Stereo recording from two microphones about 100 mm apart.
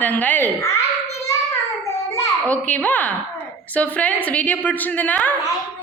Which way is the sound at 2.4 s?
15° left (ahead or behind).